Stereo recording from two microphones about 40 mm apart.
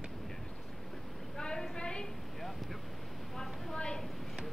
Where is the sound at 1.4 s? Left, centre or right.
Centre.